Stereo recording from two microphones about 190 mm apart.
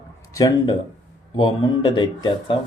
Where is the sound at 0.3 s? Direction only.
20° left (ahead or behind).